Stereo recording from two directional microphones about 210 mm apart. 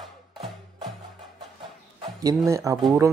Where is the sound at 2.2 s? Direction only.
15° right (ahead or behind).